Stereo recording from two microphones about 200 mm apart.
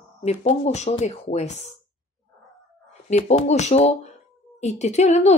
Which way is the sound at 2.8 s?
35° left (ahead or behind).